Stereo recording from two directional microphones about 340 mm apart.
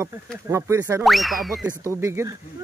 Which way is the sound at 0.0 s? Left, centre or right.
Centre.